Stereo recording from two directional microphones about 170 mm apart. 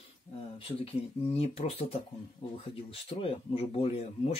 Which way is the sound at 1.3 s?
35° left (ahead or behind).